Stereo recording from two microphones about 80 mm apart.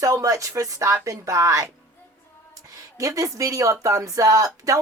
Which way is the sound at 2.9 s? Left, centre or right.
Right.